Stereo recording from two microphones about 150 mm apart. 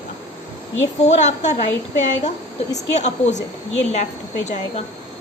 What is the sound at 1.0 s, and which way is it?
A woman's voice, 50° left (ahead or behind).